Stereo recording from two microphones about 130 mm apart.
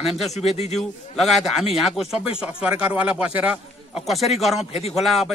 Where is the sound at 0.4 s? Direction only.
55° left (ahead or behind).